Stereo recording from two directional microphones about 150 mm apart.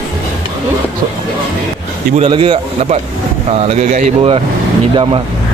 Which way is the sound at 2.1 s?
40° right (ahead or behind).